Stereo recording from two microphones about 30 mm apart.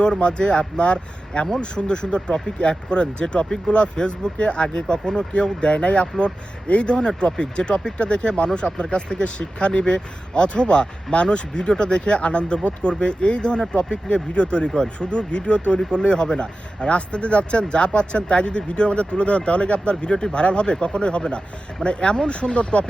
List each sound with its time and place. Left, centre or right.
0.0 s speech: left
16.9 s speech: left